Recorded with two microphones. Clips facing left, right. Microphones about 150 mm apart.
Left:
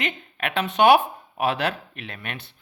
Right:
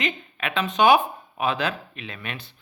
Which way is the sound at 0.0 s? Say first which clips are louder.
Even; 60° left (ahead or behind).